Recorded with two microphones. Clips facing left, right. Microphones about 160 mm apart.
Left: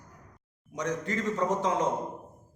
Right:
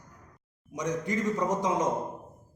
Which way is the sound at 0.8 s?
15° right (ahead or behind).